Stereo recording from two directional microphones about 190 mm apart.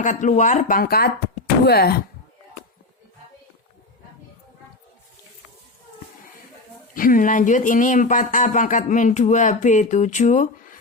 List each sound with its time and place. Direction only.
0.0 s speech: 40° left (ahead or behind); by 1.9 s 55° left (ahead or behind)
6.9 s speech: 45° left (ahead or behind)